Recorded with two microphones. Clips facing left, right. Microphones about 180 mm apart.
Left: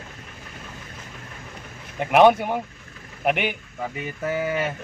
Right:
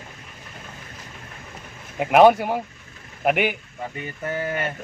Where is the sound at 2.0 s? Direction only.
5° right (ahead or behind).